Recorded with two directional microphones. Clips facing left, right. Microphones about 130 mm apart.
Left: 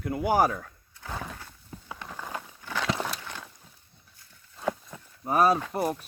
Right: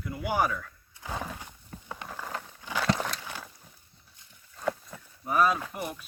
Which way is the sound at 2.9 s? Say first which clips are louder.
Right 2 dB; 5° left (ahead or behind).